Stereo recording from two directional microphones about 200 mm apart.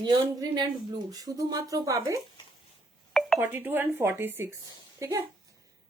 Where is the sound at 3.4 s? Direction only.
10° right (ahead or behind).